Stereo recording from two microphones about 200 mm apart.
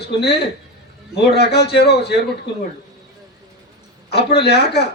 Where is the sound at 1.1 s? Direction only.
55° left (ahead or behind).